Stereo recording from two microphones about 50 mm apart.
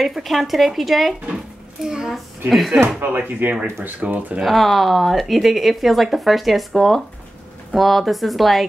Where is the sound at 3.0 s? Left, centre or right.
Right.